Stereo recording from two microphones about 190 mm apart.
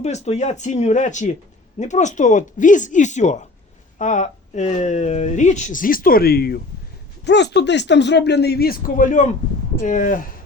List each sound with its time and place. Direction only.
0.0 s speech: 35° left (ahead or behind)